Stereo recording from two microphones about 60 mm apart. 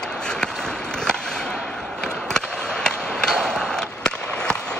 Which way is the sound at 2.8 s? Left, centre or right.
Centre.